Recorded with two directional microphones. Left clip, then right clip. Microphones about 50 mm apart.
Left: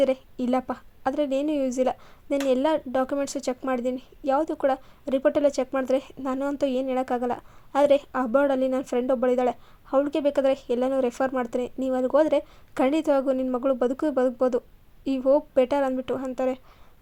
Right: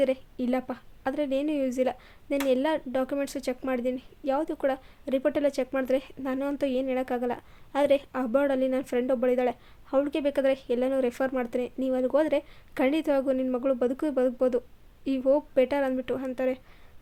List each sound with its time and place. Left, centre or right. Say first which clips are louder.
0.0 s a woman's voice: left 3 dB; left